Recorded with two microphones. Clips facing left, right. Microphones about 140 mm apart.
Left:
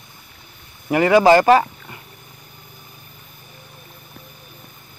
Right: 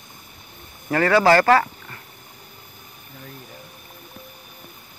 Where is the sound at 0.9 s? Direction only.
15° left (ahead or behind).